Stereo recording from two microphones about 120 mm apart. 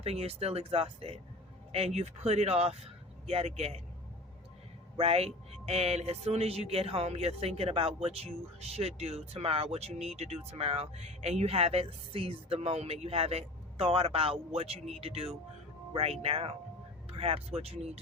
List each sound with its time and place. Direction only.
0.0 s speech: 60° right (ahead or behind)
4.9 s speech: 55° right (ahead or behind)